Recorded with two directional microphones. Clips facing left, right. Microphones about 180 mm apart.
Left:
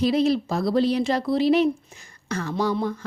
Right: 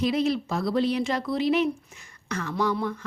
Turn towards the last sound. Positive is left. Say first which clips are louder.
# left 2 dB
turn(degrees=30)  # may be behind; listen again after turning